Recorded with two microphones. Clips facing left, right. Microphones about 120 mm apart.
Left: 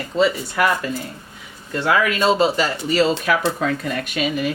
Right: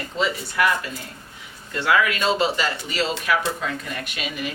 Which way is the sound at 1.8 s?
40° left (ahead or behind).